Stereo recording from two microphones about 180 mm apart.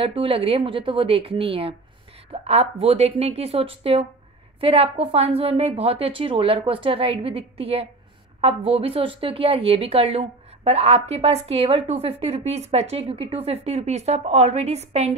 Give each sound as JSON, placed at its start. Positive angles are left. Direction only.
{"t": 0.0, "sound": "speech", "side_deg": -30}